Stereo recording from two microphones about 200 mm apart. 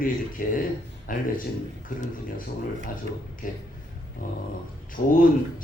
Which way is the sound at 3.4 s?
45° left (ahead or behind).